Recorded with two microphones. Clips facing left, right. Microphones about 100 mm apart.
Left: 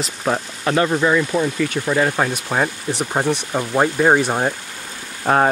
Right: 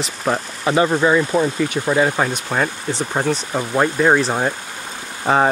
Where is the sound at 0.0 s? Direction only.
5° right (ahead or behind).